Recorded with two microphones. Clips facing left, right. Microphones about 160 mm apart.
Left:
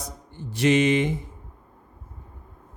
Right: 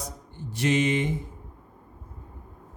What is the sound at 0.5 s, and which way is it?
Speech, 85° left.